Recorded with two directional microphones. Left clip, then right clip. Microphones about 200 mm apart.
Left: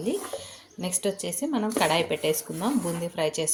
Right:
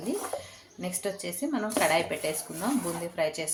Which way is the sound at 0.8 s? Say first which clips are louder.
Left 4 dB; 40° left (ahead or behind).